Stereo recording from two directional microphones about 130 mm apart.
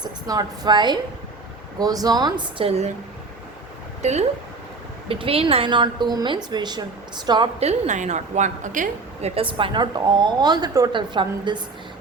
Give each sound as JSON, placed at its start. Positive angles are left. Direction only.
{"t": 0.0, "sound": "a woman's voice", "side_deg": -30}
{"t": 2.6, "sound": "speech", "side_deg": -50}
{"t": 4.0, "sound": "speech", "side_deg": -60}
{"t": 5.0, "sound": "a woman's voice", "side_deg": -45}
{"t": 7.6, "sound": "a woman's voice", "side_deg": -60}
{"t": 9.2, "sound": "a woman's voice", "side_deg": -45}